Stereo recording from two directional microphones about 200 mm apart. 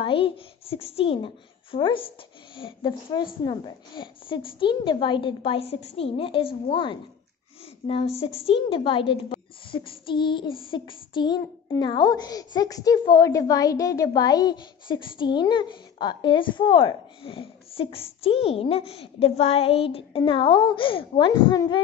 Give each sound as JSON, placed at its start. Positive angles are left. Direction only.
{"t": 0.0, "sound": "a child's voice", "side_deg": 25}